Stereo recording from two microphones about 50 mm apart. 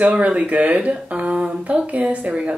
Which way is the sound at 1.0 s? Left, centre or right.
Right.